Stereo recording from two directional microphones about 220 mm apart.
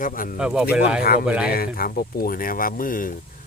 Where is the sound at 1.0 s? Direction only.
45° left (ahead or behind).